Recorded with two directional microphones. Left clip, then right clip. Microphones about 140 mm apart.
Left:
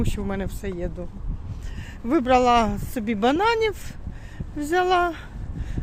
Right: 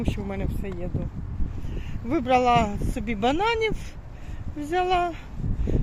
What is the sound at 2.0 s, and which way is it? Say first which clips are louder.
Speech: left 3 dB; 35° left (ahead or behind).